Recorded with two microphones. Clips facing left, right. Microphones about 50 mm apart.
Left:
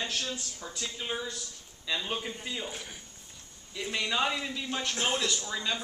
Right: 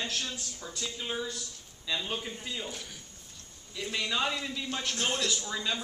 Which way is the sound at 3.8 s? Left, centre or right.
Centre.